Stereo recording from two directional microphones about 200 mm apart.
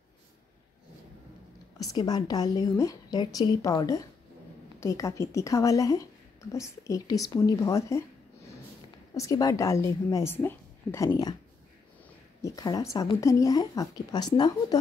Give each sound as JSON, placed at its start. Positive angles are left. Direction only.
{"t": 1.8, "sound": "a woman's voice", "side_deg": 20}
{"t": 9.1, "sound": "speech", "side_deg": 15}
{"t": 12.4, "sound": "speech", "side_deg": 15}